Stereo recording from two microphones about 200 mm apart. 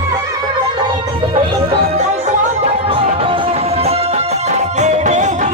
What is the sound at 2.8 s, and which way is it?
Music, 25° right (ahead or behind).